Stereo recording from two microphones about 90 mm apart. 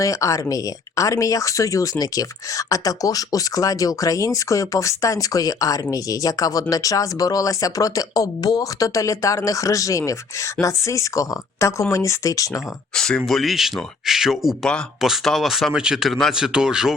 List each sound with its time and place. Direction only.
0.0 s speech: 35° left (ahead or behind)
12.9 s speech: 10° left (ahead or behind); by 16.9 s 5° right (ahead or behind)